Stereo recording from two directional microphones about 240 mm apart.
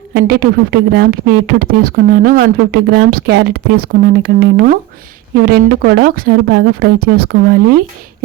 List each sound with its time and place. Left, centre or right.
0.1 s speech: right